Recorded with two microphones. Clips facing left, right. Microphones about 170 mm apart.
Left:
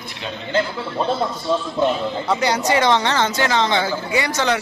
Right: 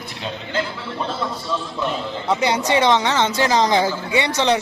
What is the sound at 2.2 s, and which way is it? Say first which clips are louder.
A man's voice: right 1 dB; 25° right (ahead or behind).